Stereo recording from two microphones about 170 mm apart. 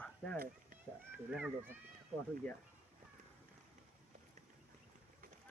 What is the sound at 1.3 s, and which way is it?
Speech, 10° right (ahead or behind).